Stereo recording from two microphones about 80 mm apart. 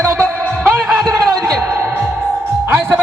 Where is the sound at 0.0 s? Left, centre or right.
Right.